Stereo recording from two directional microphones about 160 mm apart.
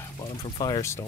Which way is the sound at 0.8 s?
15° left (ahead or behind).